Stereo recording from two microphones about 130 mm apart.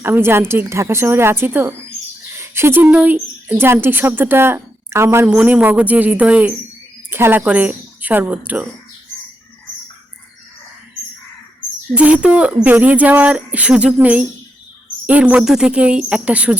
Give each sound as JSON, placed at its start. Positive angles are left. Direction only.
{"t": 0.0, "sound": "a woman's voice", "side_deg": -20}
{"t": 5.3, "sound": "speech", "side_deg": -10}
{"t": 11.9, "sound": "speech", "side_deg": -10}